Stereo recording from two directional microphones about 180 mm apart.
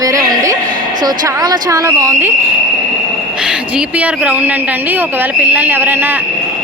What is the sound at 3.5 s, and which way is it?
Speech, 5° right (ahead or behind).